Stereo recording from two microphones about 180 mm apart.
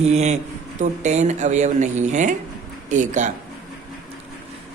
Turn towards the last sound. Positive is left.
turn(degrees=-40)  # may be behind; listen again after turning